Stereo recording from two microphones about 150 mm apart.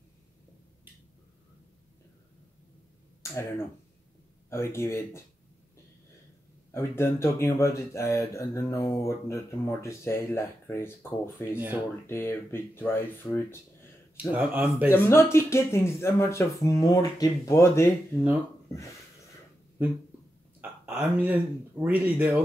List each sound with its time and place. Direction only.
3.2 s speech: 20° left (ahead or behind)
6.7 s speech: 15° left (ahead or behind)
11.5 s speech: 15° right (ahead or behind)
12.1 s speech: 15° left (ahead or behind)
14.2 s speech: 10° right (ahead or behind)
14.9 s speech: 15° left (ahead or behind)
19.8 s speech: 15° right (ahead or behind)